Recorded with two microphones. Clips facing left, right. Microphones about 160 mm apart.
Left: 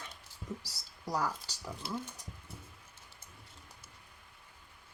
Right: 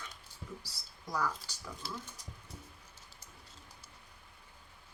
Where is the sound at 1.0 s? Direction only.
35° left (ahead or behind).